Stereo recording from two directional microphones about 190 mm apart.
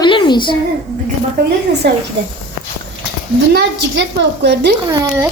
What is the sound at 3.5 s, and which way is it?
A woman's voice, 65° right (ahead or behind).